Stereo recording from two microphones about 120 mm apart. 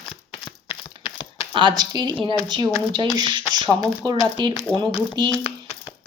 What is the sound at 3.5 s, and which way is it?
Speech, 30° right (ahead or behind).